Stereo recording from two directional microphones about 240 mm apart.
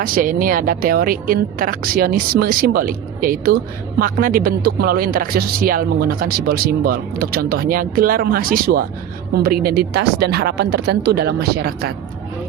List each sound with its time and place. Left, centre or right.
0.0 s speech: right